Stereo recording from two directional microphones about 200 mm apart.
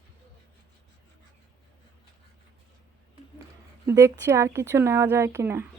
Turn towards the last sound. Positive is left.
turn(degrees=-10)  # may be behind; listen again after turning